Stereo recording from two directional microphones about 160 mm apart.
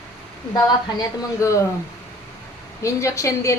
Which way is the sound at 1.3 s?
20° left (ahead or behind).